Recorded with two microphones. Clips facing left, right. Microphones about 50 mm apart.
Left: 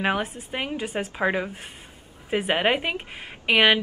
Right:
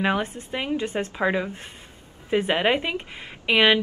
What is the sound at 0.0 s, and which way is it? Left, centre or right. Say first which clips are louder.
Speech: right 1 dB; centre.